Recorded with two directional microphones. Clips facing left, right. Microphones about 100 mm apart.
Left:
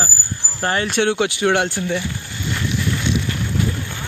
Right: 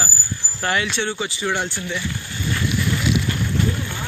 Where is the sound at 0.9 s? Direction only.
65° left (ahead or behind).